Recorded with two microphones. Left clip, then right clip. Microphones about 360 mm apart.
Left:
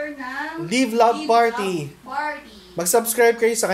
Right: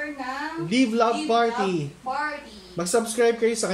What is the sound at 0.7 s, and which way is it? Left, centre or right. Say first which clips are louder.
Speech: left 5 dB; centre.